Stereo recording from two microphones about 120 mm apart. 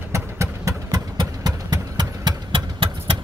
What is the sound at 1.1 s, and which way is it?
Engine, 35° right (ahead or behind).